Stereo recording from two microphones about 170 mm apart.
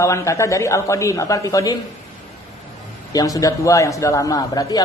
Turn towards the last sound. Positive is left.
turn(degrees=20)  # may be behind; listen again after turning